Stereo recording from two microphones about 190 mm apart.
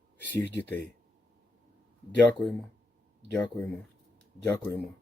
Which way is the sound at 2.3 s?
5° left (ahead or behind).